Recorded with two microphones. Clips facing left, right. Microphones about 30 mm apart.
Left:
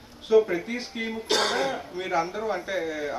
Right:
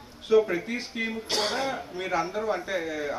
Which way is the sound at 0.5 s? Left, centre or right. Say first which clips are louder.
Left 1 dB; centre.